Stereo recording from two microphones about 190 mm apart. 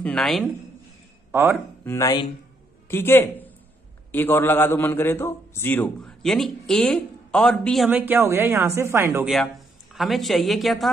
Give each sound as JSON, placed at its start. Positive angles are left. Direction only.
{"t": 0.0, "sound": "a man's voice", "side_deg": 5}
{"t": 1.3, "sound": "speech", "side_deg": -10}
{"t": 1.9, "sound": "a man's voice", "side_deg": 15}
{"t": 9.9, "sound": "a man's voice", "side_deg": 0}